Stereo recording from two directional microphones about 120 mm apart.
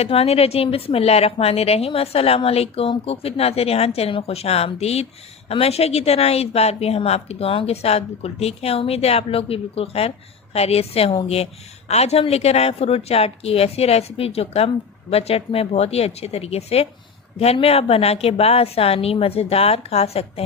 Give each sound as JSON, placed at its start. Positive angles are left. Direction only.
{"t": 0.0, "sound": "a woman's voice", "side_deg": 55}